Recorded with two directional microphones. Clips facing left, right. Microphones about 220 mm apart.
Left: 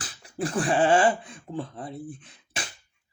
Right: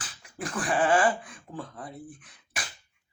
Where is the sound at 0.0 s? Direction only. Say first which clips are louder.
Left 7 dB; 30° left (ahead or behind).